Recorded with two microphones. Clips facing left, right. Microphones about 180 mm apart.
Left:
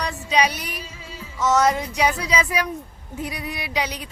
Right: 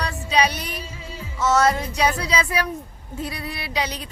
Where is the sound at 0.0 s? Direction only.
15° left (ahead or behind).